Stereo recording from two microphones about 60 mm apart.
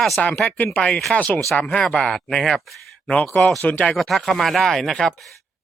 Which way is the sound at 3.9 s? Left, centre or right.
Centre.